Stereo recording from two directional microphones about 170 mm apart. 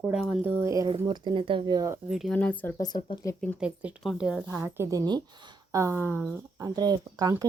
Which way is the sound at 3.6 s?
5° right (ahead or behind).